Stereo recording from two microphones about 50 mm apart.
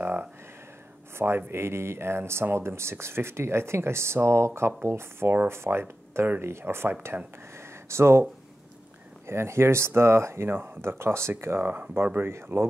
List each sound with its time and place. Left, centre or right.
0.0 s a sound: right
1.1 s speech: right
7.5 s a sound: right
9.2 s speech: right
10.5 s speech: right
11.6 s speech: right
12.3 s speech: right